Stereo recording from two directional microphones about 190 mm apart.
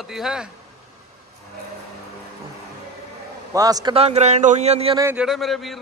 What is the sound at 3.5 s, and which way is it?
Speech, 20° right (ahead or behind).